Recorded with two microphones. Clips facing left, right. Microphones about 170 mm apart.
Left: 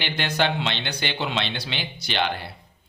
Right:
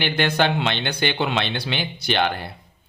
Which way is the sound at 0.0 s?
55° right (ahead or behind).